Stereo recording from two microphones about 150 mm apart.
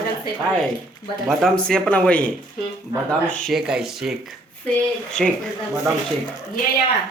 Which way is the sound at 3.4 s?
5° right (ahead or behind).